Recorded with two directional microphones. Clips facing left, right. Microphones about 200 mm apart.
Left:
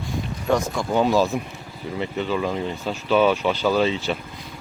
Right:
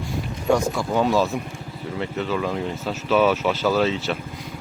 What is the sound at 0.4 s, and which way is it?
Speech, 10° right (ahead or behind).